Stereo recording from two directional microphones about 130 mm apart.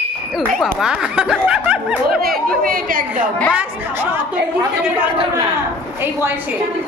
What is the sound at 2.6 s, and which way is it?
Speech, 90° right.